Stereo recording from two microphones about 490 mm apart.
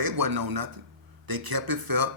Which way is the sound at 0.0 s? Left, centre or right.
Right.